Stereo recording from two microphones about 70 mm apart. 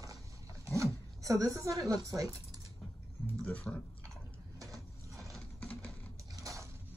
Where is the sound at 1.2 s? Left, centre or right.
Right.